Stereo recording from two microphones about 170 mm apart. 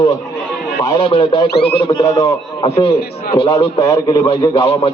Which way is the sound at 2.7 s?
35° left (ahead or behind).